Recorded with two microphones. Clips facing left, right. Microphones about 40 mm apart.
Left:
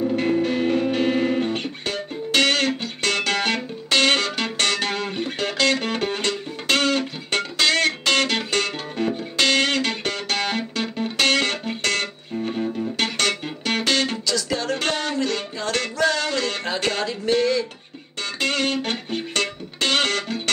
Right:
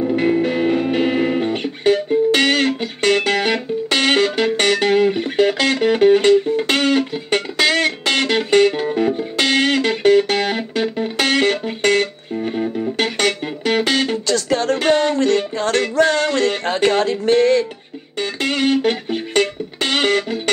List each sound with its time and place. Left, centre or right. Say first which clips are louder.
0.1 s music: right 4 dB; centre
14.2 s music: right 6 dB; right
14.8 s music: right 8 dB; centre
17.0 s a sound: right 6 dB; right
18.4 s music: right 6 dB; centre